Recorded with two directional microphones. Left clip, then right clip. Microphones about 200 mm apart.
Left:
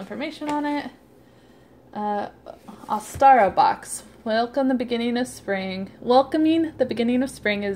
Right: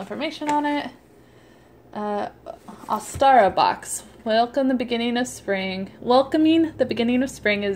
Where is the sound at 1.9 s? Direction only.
5° right (ahead or behind).